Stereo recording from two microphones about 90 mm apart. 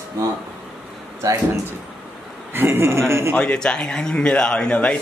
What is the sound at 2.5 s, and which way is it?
Speech, 25° right (ahead or behind).